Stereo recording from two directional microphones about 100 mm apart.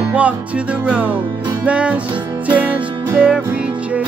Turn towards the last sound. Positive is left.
turn(degrees=-15)  # may be behind; listen again after turning